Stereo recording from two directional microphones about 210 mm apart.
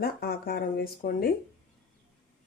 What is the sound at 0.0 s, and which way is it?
Speech, 45° left (ahead or behind).